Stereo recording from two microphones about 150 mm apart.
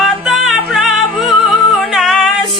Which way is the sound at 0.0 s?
Centre (ahead or behind).